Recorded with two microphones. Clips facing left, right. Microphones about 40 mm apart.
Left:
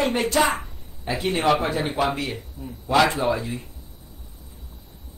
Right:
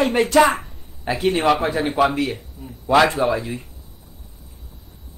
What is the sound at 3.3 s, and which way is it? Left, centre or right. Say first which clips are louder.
Speech: right 3 dB; right.